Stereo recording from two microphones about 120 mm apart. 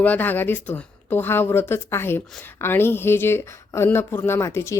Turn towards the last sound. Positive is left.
turn(degrees=25)  # may be behind; listen again after turning